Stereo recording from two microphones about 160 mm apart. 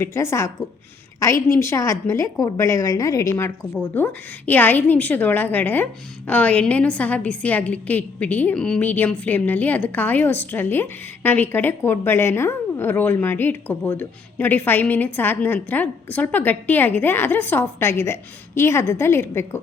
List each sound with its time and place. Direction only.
0.0 s a woman's voice: 15° left (ahead or behind)